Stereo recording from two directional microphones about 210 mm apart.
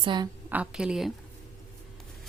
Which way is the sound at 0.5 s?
5° right (ahead or behind).